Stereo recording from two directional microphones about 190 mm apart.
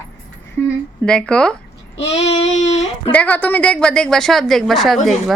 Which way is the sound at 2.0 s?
35° left (ahead or behind).